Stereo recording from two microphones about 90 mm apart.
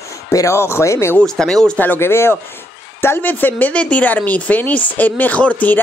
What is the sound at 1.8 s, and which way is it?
A woman's voice, 25° left (ahead or behind).